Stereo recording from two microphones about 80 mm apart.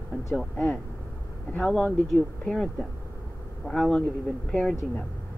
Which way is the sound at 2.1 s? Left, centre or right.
Centre.